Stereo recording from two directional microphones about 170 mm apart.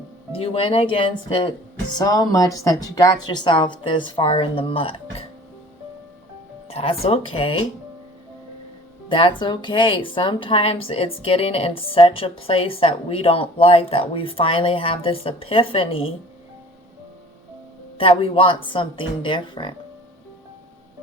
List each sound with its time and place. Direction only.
0.3 s a woman's voice: 35° left (ahead or behind)
6.7 s speech: 35° left (ahead or behind)
9.0 s speech: 30° left (ahead or behind)
17.9 s speech: 35° left (ahead or behind)